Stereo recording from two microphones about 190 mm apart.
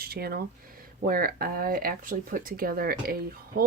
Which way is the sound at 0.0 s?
55° right (ahead or behind).